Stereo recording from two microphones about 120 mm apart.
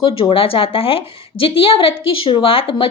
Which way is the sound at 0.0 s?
50° left (ahead or behind).